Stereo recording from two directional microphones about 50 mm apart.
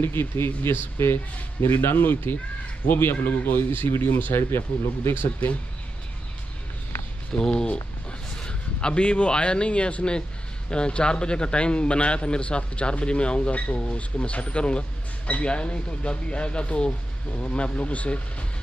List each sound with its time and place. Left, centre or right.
0.0 s speech: left
7.3 s a man's voice: centre